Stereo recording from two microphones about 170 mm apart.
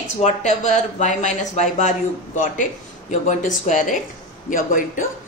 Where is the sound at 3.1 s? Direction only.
45° left (ahead or behind).